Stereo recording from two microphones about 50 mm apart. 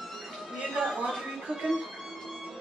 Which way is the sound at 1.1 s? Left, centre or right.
Centre.